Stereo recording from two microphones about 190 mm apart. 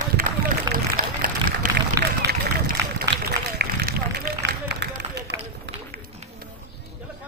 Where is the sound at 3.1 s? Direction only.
55° right (ahead or behind).